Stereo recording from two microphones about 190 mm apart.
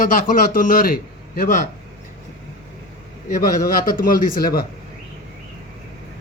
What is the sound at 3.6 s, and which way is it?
Speech, 50° left (ahead or behind).